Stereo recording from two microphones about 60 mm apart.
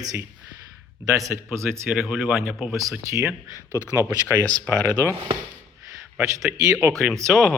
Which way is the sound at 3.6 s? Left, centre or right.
Left.